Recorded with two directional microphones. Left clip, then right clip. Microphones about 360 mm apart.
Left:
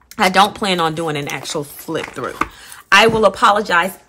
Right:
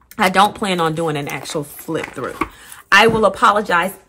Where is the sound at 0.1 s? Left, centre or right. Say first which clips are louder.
Left 1 dB; centre.